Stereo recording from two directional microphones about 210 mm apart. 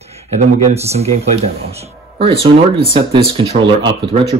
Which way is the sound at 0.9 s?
30° right (ahead or behind).